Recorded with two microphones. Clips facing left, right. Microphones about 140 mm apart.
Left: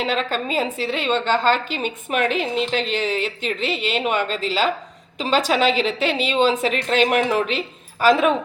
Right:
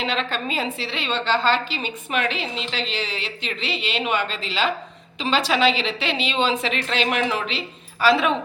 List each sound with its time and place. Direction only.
0.0 s a woman's voice: 45° left (ahead or behind)